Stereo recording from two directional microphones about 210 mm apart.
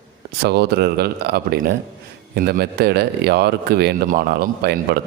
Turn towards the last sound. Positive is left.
turn(degrees=-50)  # may be behind; listen again after turning